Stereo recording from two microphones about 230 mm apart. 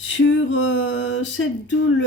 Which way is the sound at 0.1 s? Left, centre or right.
Left.